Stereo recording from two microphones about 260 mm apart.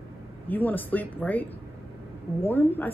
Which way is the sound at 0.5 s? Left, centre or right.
Centre.